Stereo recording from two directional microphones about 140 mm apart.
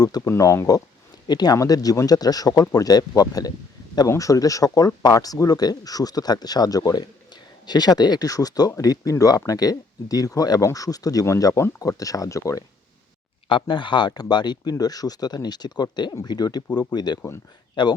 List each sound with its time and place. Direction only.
0.0 s speech: 25° left (ahead or behind)
13.5 s speech: 35° left (ahead or behind)